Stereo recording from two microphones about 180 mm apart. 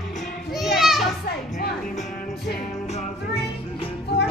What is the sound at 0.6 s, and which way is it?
Children playing, centre (ahead or behind).